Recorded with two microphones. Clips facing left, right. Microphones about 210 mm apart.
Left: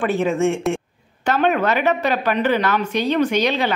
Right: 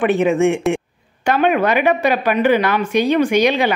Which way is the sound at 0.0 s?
20° right (ahead or behind).